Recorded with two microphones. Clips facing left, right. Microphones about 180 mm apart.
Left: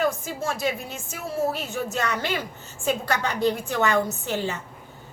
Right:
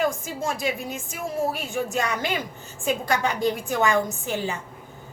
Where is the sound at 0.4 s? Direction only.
15° right (ahead or behind).